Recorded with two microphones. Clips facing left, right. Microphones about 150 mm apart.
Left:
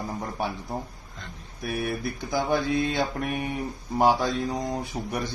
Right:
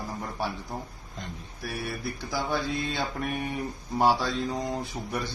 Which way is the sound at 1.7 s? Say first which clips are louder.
Left 5 dB; 15° left (ahead or behind).